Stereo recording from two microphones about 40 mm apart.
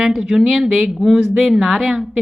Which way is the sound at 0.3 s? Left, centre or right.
Centre.